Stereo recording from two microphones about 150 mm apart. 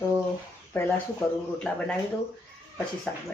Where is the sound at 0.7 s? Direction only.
15° left (ahead or behind).